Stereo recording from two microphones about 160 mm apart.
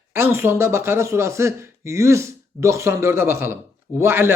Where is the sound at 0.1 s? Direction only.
15° right (ahead or behind).